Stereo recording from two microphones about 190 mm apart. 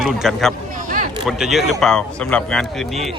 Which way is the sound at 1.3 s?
Centre (ahead or behind).